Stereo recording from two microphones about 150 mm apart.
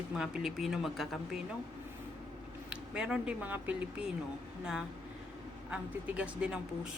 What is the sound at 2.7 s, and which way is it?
Speech, 5° right (ahead or behind).